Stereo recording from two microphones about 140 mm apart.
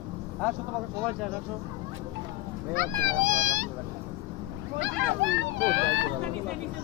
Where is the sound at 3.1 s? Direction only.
70° right (ahead or behind).